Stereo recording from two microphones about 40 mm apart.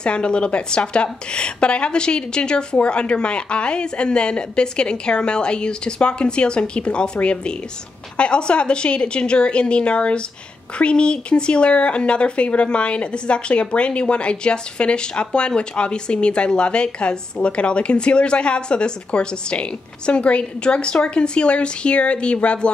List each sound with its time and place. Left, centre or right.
0.0 s speech: left